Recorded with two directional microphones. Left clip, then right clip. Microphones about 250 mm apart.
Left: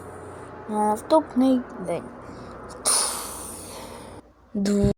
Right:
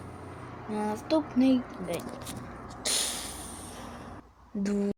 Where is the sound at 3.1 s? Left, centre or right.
Centre.